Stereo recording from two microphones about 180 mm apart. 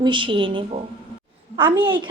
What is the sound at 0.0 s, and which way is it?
A woman's voice, 25° right (ahead or behind).